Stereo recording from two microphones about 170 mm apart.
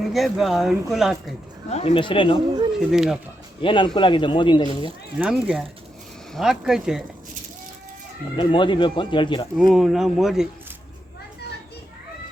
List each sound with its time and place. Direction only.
0.0 s speech: centre (ahead or behind)
1.7 s speech: 35° left (ahead or behind)
2.7 s speech: centre (ahead or behind)
3.6 s a man's voice: 30° left (ahead or behind)
5.1 s speech: 5° right (ahead or behind)
8.4 s a man's voice: 30° left (ahead or behind)
9.7 s speech: centre (ahead or behind)